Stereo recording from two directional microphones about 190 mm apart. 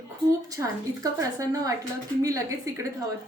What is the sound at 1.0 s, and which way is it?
Speech, 20° right (ahead or behind).